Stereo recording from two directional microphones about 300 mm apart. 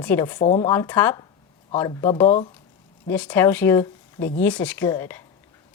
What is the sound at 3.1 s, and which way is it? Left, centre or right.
A woman's voice, centre.